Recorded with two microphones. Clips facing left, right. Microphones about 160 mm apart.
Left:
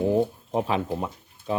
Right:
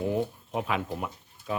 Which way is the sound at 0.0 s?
30° left (ahead or behind).